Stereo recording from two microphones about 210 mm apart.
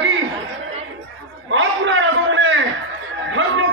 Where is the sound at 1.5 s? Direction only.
65° right (ahead or behind).